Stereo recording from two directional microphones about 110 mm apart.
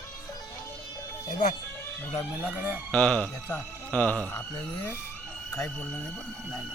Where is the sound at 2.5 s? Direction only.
15° right (ahead or behind).